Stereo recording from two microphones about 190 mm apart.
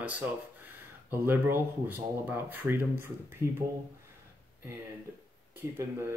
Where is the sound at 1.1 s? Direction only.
10° right (ahead or behind).